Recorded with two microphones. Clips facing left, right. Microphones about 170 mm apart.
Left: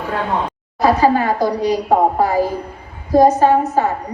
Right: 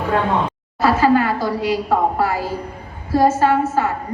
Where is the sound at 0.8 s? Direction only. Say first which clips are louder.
Left 1 dB; 15° left (ahead or behind).